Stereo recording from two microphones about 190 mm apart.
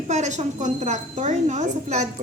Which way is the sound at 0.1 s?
35° right (ahead or behind).